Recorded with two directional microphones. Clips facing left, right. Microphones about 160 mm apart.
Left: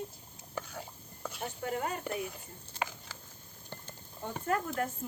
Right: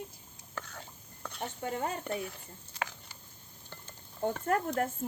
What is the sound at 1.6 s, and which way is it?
Speech, 30° right (ahead or behind).